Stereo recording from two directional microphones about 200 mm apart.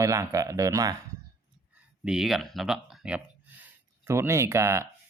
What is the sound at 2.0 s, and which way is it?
Speech, centre (ahead or behind).